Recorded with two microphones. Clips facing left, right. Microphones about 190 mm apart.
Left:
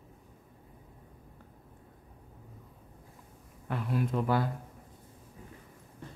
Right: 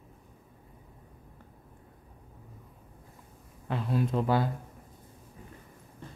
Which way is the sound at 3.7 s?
25° right (ahead or behind).